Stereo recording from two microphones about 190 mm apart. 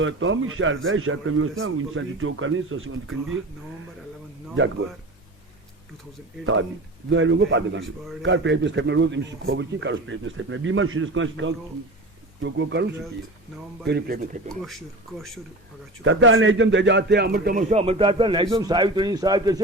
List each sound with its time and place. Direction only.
0.0 s speech: 90° right
6.4 s a man's voice: 90° right
12.4 s a man's voice: 75° right (ahead or behind)
14.2 s speech: 40° right (ahead or behind)
16.0 s a man's voice: 90° right; by 19.6 s 20° right (ahead or behind)